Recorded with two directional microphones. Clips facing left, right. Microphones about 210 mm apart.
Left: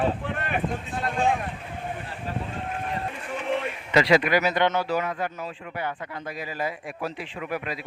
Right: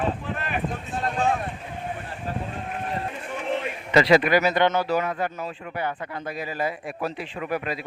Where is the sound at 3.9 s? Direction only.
35° right (ahead or behind).